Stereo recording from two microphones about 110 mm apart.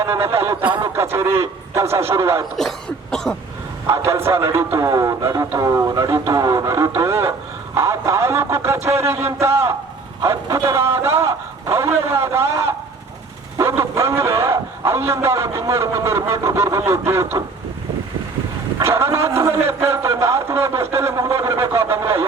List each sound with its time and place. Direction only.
0.0 s a man's voice: 20° right (ahead or behind)
2.6 s cough: 5° left (ahead or behind)
3.8 s a man's voice: 25° right (ahead or behind)
7.8 s music: 25° right (ahead or behind)
9.0 s a man's voice: 20° right (ahead or behind)
18.8 s a man's voice: 20° right (ahead or behind)